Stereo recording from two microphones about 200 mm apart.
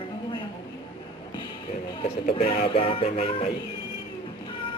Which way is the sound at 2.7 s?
30° left (ahead or behind).